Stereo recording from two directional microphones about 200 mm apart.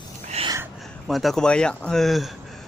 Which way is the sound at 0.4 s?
30° right (ahead or behind).